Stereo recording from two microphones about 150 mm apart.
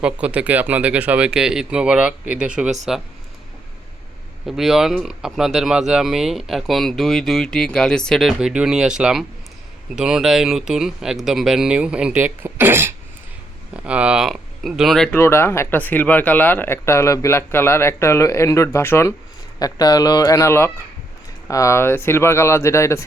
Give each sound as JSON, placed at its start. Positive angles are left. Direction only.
{"t": 0.0, "sound": "speech", "side_deg": -10}
{"t": 4.4, "sound": "speech", "side_deg": 0}
{"t": 15.2, "sound": "speech", "side_deg": 15}